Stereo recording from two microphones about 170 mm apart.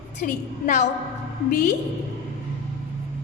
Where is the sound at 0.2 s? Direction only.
50° left (ahead or behind).